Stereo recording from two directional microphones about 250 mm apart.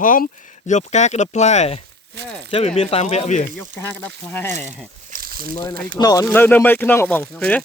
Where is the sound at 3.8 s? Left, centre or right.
Centre.